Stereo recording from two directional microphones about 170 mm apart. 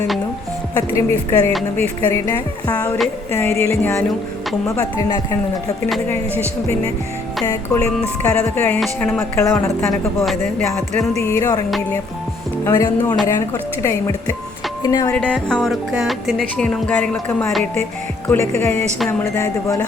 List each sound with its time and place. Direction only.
0.8 s music: 15° left (ahead or behind)
2.7 s music: 5° left (ahead or behind)
4.7 s a woman's voice: 20° left (ahead or behind)
6.1 s music: 15° left (ahead or behind)
7.4 s a woman's voice: 20° left (ahead or behind)
8.2 s music: 10° left (ahead or behind)
8.8 s speech: centre (ahead or behind)
9.1 s music: 15° left (ahead or behind)
11.2 s music: 15° left (ahead or behind)
12.6 s a woman's voice: 15° left (ahead or behind)
13.2 s music: 15° left (ahead or behind)
14.8 s a woman's voice: 20° left (ahead or behind)
15.1 s speech: 5° left (ahead or behind)
18.3 s music: 15° left (ahead or behind)